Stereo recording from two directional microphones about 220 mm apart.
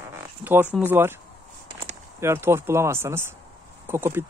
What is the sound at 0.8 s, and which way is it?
Speech, 10° right (ahead or behind).